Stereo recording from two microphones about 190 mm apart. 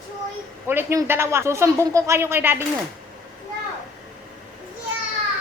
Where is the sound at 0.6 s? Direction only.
15° right (ahead or behind).